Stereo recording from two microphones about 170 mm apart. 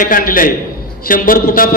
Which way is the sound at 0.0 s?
55° left (ahead or behind).